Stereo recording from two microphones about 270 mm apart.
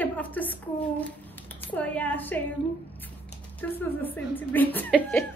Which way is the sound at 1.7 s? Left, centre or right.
Centre.